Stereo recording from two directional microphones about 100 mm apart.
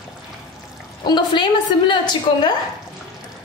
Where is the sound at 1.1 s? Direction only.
45° left (ahead or behind).